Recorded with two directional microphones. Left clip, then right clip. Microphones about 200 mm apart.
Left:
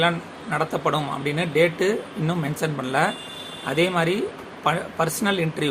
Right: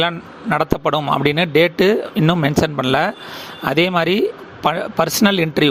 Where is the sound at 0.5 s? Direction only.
45° right (ahead or behind).